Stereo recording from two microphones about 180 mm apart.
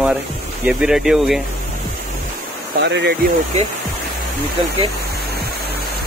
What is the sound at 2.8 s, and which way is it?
Speech, 75° right (ahead or behind).